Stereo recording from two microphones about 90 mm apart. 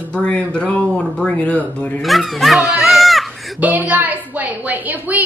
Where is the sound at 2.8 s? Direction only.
Centre (ahead or behind).